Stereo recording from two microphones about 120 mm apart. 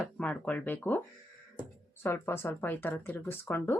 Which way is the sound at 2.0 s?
20° left (ahead or behind).